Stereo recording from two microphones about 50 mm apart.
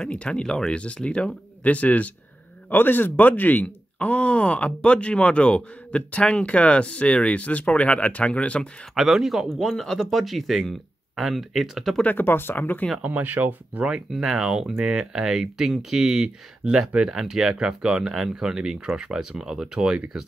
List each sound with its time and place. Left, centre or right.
0.0 s speech: centre
2.7 s speech: left
8.9 s speech: centre
12.0 s speech: left
13.0 s speech: right
14.1 s speech: centre